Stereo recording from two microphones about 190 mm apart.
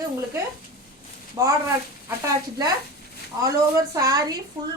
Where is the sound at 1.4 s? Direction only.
20° right (ahead or behind).